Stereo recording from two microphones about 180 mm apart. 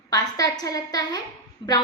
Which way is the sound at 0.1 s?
20° left (ahead or behind).